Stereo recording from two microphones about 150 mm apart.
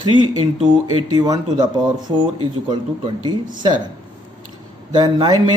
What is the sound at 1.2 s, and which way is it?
Speech, 25° right (ahead or behind).